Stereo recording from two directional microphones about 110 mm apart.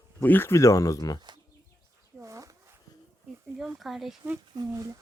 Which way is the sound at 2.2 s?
30° right (ahead or behind).